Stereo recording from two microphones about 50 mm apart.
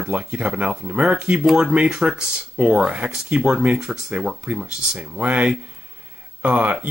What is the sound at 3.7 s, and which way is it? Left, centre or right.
Speech, centre.